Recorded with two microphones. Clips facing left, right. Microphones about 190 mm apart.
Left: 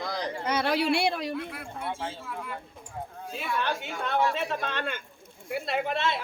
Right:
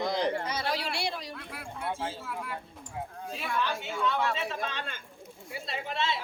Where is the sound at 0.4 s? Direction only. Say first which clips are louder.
Left 7 dB; 60° left (ahead or behind).